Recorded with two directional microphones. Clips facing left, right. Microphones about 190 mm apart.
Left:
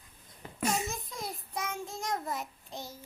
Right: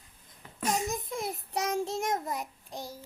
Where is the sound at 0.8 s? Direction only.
25° right (ahead or behind).